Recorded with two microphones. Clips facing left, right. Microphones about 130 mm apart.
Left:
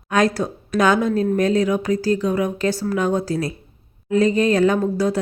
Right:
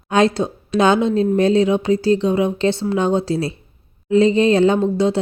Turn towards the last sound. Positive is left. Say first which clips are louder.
# right 3 dB
turn(degrees=-25)  # may be behind; listen again after turning